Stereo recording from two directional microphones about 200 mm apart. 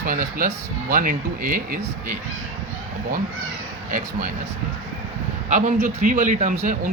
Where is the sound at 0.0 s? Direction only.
45° right (ahead or behind).